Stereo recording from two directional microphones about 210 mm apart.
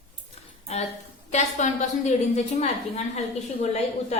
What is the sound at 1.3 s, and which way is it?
A woman's voice, 35° left (ahead or behind).